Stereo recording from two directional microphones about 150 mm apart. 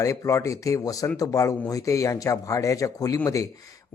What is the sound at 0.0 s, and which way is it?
Speech, 20° left (ahead or behind).